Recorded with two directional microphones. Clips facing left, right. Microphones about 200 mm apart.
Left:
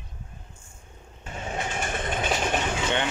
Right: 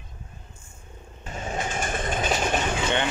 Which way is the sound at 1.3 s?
40° right (ahead or behind).